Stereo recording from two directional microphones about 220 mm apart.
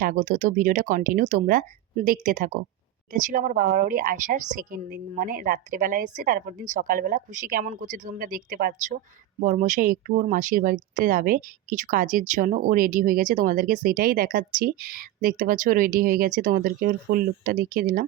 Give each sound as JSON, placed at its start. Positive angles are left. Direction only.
{"t": 0.0, "sound": "speech", "side_deg": -35}